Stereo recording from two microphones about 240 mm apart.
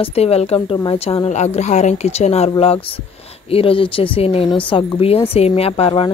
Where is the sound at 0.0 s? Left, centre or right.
Left.